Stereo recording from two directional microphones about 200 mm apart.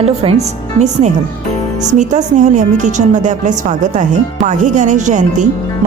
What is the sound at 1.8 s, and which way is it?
A woman's voice, 35° right (ahead or behind).